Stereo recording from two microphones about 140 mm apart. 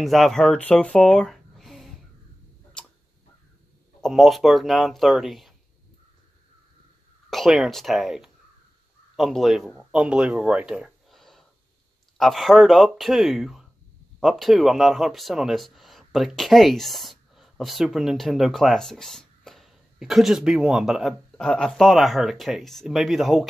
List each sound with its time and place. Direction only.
0.0 s speech: centre (ahead or behind)
4.0 s speech: centre (ahead or behind)
7.2 s speech: centre (ahead or behind)